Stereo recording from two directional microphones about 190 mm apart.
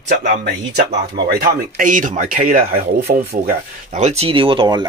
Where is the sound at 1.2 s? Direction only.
55° right (ahead or behind).